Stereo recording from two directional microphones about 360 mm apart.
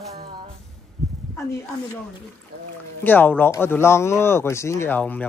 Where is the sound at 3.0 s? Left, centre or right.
Centre.